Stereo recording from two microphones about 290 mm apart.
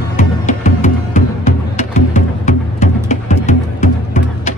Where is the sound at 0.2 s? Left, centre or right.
Left.